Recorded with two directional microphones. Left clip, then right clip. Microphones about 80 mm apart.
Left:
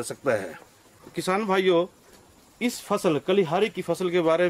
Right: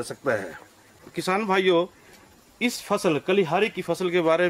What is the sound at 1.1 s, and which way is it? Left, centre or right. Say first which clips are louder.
Speech: right 1 dB; centre.